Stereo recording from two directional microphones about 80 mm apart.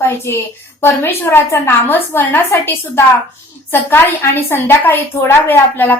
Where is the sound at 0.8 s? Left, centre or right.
Left.